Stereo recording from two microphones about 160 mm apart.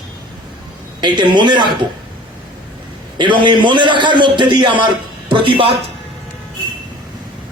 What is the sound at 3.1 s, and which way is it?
A man's voice, 30° right (ahead or behind).